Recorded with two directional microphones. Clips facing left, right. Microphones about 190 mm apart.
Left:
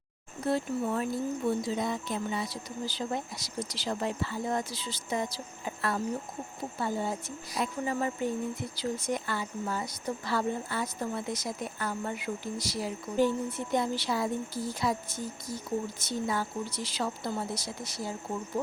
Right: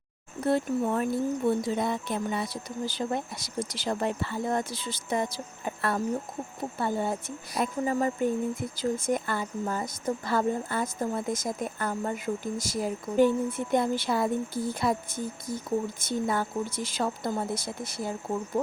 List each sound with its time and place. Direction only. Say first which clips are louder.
0.4 s speech: right 4 dB; 55° right (ahead or behind)